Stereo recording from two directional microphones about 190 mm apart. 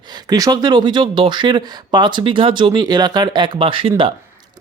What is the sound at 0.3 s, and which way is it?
Speech, 20° right (ahead or behind).